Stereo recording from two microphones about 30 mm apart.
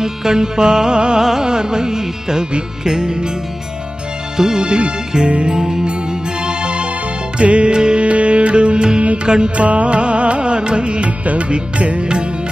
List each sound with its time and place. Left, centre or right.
0.0 s music: centre
4.6 s music: right
5.5 s music: right
8.0 s music: right
9.7 s music: right
11.1 s music: right
12.0 s music: right